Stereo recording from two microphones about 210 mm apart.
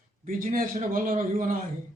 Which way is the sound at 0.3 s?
40° right (ahead or behind).